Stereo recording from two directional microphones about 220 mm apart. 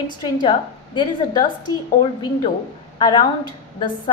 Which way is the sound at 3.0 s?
20° left (ahead or behind).